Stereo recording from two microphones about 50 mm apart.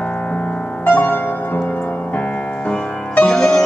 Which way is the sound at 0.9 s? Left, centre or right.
Left.